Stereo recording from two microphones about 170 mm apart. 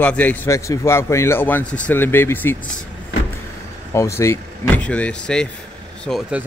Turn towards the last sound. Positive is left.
turn(degrees=0)  # may be behind; listen again after turning